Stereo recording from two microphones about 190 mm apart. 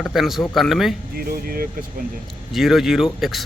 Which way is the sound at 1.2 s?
50° right (ahead or behind).